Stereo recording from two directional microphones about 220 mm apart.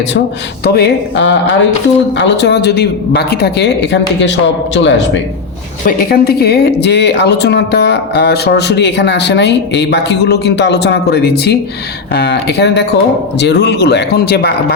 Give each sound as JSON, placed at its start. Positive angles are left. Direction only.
{"t": 0.6, "sound": "speech", "side_deg": 45}
{"t": 5.8, "sound": "speech", "side_deg": 40}